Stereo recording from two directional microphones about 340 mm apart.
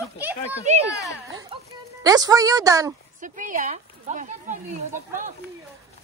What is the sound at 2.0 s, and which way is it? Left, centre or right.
Speech, centre.